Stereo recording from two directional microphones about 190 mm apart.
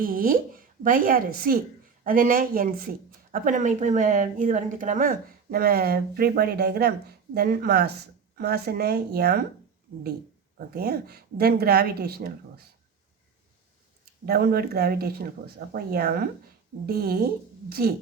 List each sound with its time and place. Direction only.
0.0 s speech: 50° right (ahead or behind)
10.8 s speech: 55° right (ahead or behind)
14.3 s speech: 55° right (ahead or behind)